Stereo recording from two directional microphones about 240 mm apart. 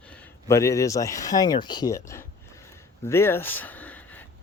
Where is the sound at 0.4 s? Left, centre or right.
Centre.